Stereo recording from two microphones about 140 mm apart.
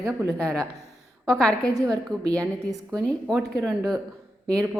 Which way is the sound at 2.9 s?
Centre (ahead or behind).